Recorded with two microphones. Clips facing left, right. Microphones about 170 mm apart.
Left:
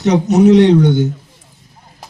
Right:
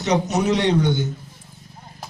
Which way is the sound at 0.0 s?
60° left (ahead or behind).